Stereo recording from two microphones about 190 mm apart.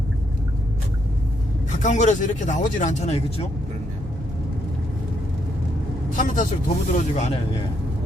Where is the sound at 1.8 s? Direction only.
40° left (ahead or behind).